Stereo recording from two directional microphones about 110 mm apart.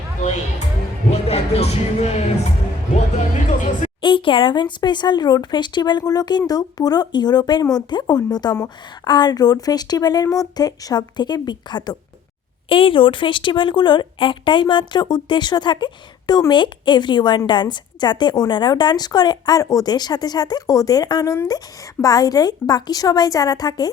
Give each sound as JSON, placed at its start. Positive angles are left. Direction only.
{"t": 0.2, "sound": "music", "side_deg": 90}
{"t": 1.1, "sound": "speech", "side_deg": 70}
{"t": 4.0, "sound": "speech", "side_deg": 50}
{"t": 12.6, "sound": "speech", "side_deg": 55}